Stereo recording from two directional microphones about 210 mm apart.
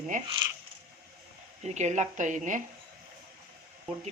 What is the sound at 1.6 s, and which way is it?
Speech, 35° right (ahead or behind).